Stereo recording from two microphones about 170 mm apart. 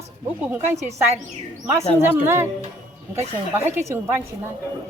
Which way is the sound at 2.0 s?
15° right (ahead or behind).